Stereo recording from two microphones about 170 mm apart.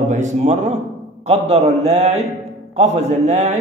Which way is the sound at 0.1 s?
45° right (ahead or behind).